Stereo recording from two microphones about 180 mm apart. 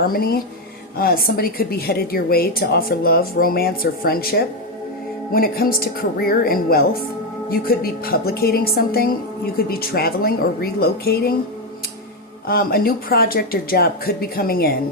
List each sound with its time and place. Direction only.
0.0 s a woman's voice: 55° left (ahead or behind)
12.5 s a woman's voice: 55° left (ahead or behind)